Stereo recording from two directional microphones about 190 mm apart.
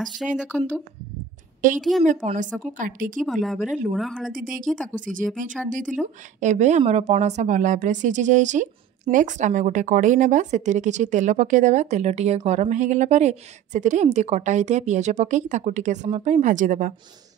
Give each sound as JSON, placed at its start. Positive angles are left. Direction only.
{"t": 0.4, "sound": "speech", "side_deg": -5}
{"t": 2.2, "sound": "a woman's voice", "side_deg": -40}
{"t": 3.2, "sound": "speech", "side_deg": 0}
{"t": 4.3, "sound": "a woman's voice", "side_deg": -45}